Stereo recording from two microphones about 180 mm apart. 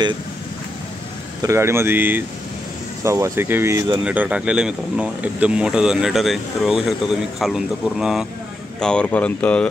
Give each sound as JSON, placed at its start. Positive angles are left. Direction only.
{"t": 1.4, "sound": "speech", "side_deg": -15}